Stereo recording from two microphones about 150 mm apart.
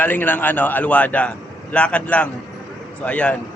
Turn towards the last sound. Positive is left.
turn(degrees=10)  # may be behind; listen again after turning